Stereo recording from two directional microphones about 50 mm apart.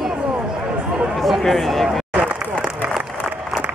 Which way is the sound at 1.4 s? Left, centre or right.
Centre.